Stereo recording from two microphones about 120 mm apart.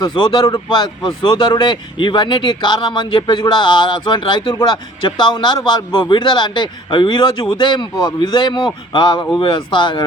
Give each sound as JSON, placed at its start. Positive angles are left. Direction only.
{"t": 0.0, "sound": "speech", "side_deg": 45}